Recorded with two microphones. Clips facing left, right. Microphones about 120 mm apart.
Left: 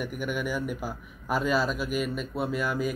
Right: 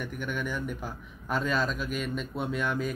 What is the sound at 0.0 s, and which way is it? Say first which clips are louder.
A man's voice: left 3 dB; 10° left (ahead or behind).